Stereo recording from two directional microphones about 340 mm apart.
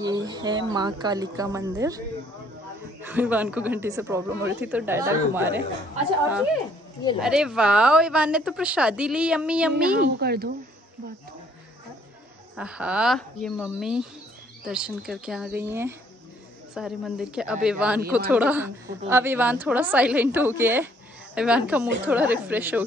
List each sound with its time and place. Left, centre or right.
0.0 s speech: centre
9.9 s speech: right
12.5 s speech: centre